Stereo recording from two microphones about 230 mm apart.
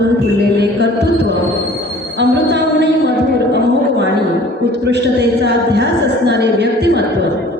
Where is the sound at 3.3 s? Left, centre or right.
Right.